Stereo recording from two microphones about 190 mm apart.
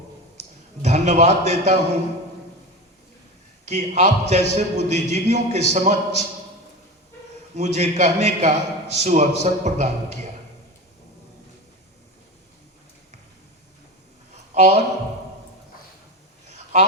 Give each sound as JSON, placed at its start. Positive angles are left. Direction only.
{"t": 0.8, "sound": "a man's voice", "side_deg": -35}
{"t": 3.7, "sound": "a man's voice", "side_deg": -35}
{"t": 7.5, "sound": "a man's voice", "side_deg": -35}
{"t": 14.5, "sound": "speech", "side_deg": -35}